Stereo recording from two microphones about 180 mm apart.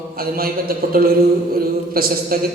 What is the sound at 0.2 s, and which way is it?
A woman's voice, 55° right (ahead or behind).